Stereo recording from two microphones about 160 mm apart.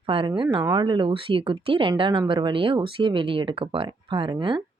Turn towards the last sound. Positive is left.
turn(degrees=-30)  # may be behind; listen again after turning